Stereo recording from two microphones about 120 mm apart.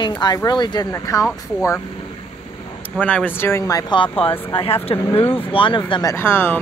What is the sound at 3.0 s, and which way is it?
Speech, 10° left (ahead or behind).